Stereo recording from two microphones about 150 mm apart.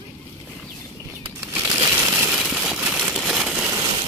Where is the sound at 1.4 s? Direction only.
15° right (ahead or behind).